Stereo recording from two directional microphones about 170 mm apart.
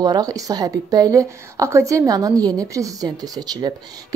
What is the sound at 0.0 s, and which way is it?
A woman's voice, 20° right (ahead or behind).